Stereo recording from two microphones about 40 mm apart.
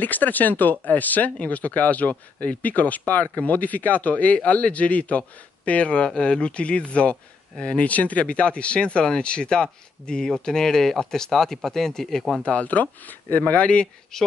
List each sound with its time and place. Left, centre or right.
0.0 s speech: left; by 12.4 s centre
12.4 s speech: left
14.1 s speech: centre